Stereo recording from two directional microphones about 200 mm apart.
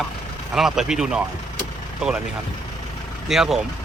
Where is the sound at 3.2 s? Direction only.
Centre (ahead or behind).